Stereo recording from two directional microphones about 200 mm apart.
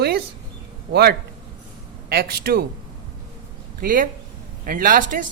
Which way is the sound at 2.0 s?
50° right (ahead or behind).